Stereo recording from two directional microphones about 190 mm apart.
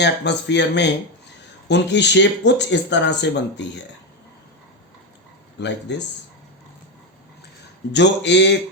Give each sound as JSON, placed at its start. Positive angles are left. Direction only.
{"t": 0.0, "sound": "speech", "side_deg": 65}
{"t": 5.5, "sound": "speech", "side_deg": 65}
{"t": 7.9, "sound": "speech", "side_deg": 65}